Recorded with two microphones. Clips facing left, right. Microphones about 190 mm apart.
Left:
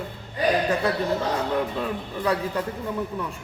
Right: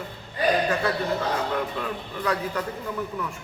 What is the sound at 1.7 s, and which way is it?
Speech, 25° left (ahead or behind).